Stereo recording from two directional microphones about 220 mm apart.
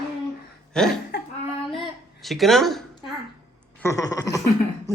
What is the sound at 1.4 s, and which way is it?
Child singing, 25° left (ahead or behind).